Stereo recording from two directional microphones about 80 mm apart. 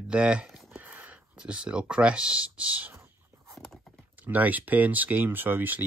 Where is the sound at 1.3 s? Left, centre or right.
Centre.